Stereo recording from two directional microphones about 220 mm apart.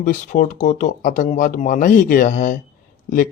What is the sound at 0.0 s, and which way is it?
Speech, 35° left (ahead or behind).